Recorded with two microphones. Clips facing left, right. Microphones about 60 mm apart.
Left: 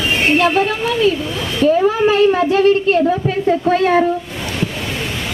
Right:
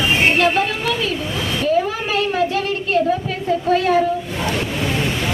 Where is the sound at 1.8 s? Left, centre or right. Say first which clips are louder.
Left 9 dB; left.